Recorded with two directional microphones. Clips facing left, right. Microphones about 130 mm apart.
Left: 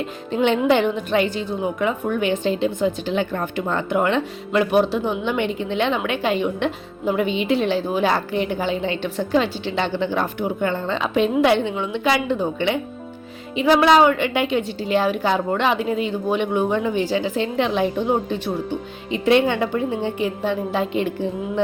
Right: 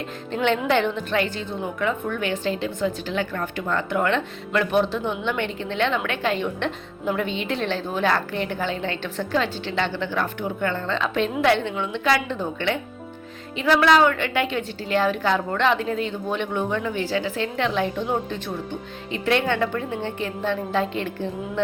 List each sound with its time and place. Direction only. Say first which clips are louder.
0.3 s a woman's voice: left 4 dB; 15° left (ahead or behind)